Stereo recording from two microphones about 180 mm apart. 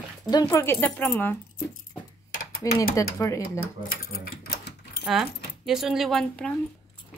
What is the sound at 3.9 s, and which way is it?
Speech, 55° left (ahead or behind).